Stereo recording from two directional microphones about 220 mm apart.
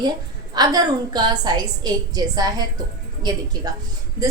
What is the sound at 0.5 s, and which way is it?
A woman's voice, 20° right (ahead or behind).